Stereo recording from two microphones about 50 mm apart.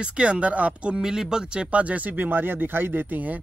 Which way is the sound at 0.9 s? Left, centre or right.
Centre.